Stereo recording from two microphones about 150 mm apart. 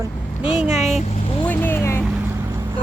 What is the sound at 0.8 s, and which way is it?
Vehicle, 50° left (ahead or behind).